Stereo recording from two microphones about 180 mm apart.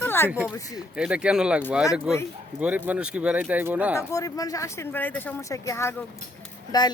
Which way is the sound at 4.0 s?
15° left (ahead or behind).